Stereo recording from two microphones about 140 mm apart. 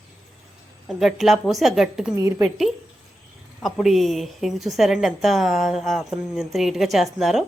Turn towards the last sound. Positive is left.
turn(degrees=0)  # may be behind; listen again after turning